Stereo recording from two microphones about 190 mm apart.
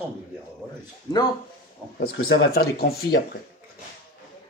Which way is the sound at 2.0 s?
55° left (ahead or behind).